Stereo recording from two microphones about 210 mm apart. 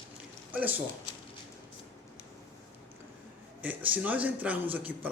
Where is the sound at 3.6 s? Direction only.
5° right (ahead or behind).